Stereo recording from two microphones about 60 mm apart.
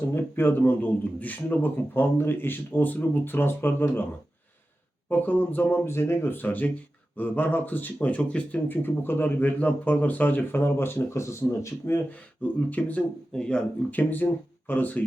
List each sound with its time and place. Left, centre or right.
0.1 s speech: left
5.0 s speech: left
5.8 s speech: left
12.1 s speech: left
13.3 s speech: centre
13.9 s speech: left